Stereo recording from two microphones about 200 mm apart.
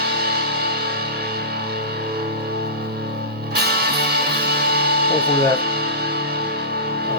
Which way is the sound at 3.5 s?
50° right (ahead or behind).